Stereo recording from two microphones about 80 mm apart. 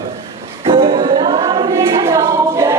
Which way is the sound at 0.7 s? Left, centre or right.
Right.